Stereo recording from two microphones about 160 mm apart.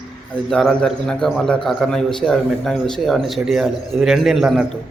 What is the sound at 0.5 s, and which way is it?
A man's voice, 5° left (ahead or behind).